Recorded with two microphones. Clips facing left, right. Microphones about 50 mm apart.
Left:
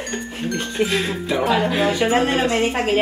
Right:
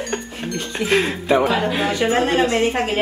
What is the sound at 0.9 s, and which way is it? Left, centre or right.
Speech, right.